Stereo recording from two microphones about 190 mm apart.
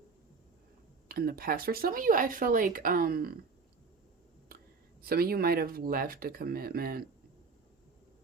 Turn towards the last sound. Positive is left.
turn(degrees=-50)  # may be behind; listen again after turning